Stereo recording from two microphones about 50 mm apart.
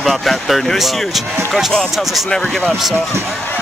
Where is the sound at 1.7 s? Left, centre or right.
Centre.